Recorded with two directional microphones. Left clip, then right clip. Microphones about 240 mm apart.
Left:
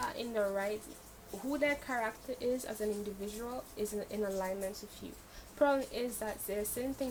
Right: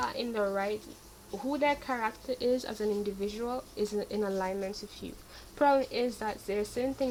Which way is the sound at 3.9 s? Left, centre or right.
Right.